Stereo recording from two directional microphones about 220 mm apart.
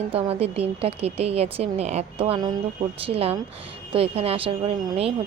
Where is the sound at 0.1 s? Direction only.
25° right (ahead or behind).